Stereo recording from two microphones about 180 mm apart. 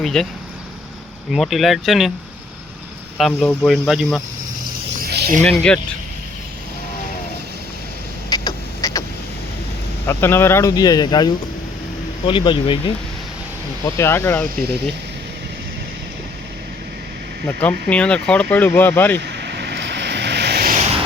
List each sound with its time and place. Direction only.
0.0 s speech: 5° left (ahead or behind)
1.3 s speech: centre (ahead or behind)
3.2 s speech: centre (ahead or behind)
5.0 s a sound: 60° right (ahead or behind)
5.5 s speech: 5° left (ahead or behind)
8.3 s a sound: 20° left (ahead or behind)
10.1 s speech: 15° left (ahead or behind)
13.8 s speech: 15° left (ahead or behind)
17.4 s speech: 10° left (ahead or behind)
19.2 s vehicle: 70° right (ahead or behind)